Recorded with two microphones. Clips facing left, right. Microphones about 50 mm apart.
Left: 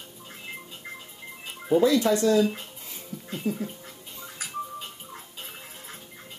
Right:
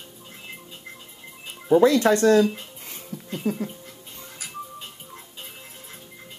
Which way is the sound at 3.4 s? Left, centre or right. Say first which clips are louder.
Right 3 dB; right.